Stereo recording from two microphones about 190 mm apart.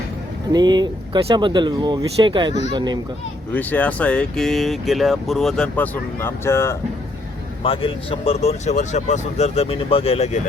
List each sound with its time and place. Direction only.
0.5 s speech: 20° right (ahead or behind)
3.5 s speech: 10° left (ahead or behind)
7.6 s speech: 30° left (ahead or behind)